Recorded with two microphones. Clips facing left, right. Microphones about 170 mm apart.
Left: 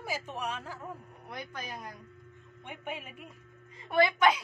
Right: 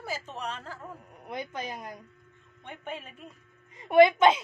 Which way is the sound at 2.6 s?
10° left (ahead or behind).